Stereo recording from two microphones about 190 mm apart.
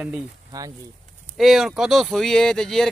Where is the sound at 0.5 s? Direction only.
20° right (ahead or behind).